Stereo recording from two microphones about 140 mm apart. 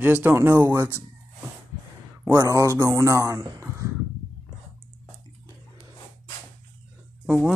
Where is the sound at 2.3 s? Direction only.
20° right (ahead or behind).